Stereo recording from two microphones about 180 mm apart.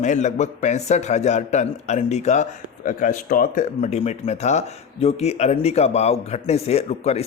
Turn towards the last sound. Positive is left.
turn(degrees=35)  # may be behind; listen again after turning